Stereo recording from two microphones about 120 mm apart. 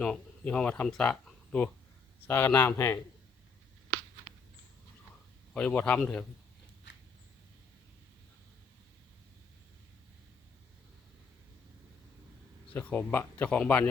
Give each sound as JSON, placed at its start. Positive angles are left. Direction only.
{"t": 0.0, "sound": "speech", "side_deg": 10}
{"t": 5.5, "sound": "speech", "side_deg": 10}
{"t": 12.7, "sound": "speech", "side_deg": 10}